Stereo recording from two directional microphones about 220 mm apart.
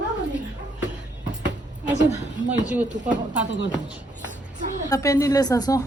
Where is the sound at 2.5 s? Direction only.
5° right (ahead or behind).